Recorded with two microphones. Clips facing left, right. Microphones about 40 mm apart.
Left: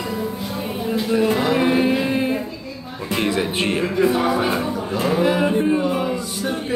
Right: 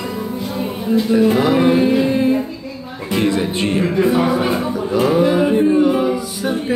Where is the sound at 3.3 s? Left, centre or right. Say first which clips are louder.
Right 3 dB; centre.